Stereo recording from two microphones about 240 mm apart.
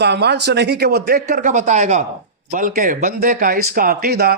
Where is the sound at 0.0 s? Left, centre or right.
Right.